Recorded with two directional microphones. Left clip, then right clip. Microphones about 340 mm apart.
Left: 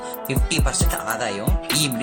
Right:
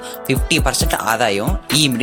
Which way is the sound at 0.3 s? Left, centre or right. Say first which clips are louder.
Right 8 dB; right.